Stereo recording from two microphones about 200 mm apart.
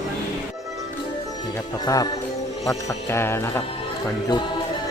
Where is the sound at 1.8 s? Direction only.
20° left (ahead or behind).